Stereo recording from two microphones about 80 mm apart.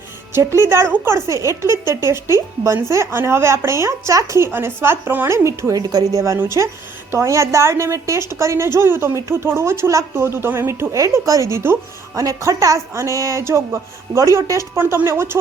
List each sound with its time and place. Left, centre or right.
0.3 s speech: right
4.5 s speech: right
12.1 s speech: right
14.8 s speech: right